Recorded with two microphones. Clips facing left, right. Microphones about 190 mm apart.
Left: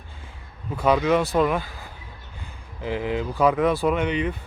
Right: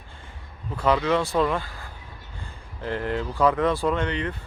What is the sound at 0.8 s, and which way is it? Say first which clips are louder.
Speech: left 2 dB; 15° left (ahead or behind).